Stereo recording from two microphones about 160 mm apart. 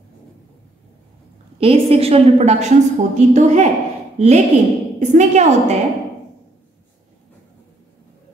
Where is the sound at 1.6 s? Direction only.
35° right (ahead or behind).